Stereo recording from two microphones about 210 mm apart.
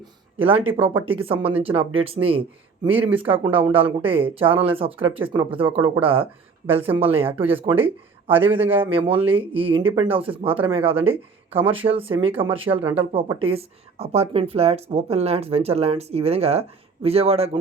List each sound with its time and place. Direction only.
0.4 s speech: 25° right (ahead or behind)
8.5 s a man's voice: 10° right (ahead or behind)
9.0 s speech: 25° right (ahead or behind)